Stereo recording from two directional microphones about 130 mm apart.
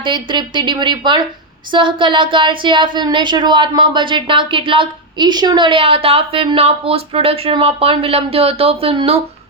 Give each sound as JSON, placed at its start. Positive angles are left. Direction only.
{"t": 0.0, "sound": "speech", "side_deg": -40}